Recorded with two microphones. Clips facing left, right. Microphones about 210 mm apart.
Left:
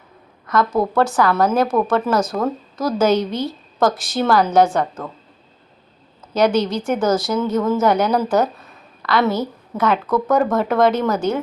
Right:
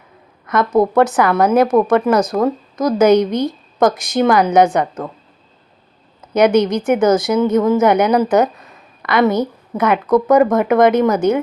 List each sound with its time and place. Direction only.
0.5 s a woman's voice: 20° right (ahead or behind)
6.3 s speech: 20° right (ahead or behind)
7.1 s speech: centre (ahead or behind)
7.3 s a woman's voice: 20° right (ahead or behind)